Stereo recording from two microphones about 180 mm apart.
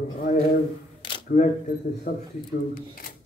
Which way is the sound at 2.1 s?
50° left (ahead or behind).